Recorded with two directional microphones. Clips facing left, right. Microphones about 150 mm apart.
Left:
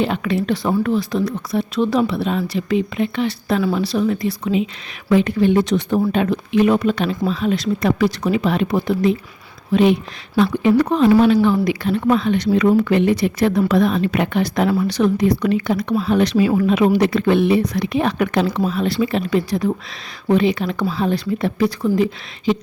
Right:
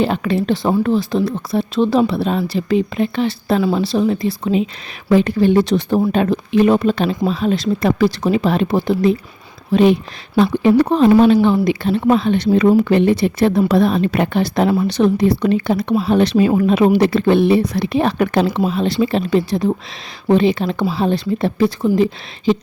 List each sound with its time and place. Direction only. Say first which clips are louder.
0.0 s speech: right 2 dB; 35° right (ahead or behind)